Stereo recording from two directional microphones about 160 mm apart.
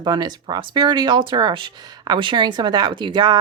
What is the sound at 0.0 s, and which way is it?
Speech, 25° right (ahead or behind).